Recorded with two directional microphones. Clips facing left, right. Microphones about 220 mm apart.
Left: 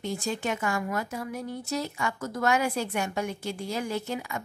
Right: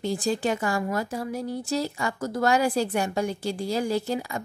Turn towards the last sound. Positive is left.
turn(degrees=-35)  # may be behind; listen again after turning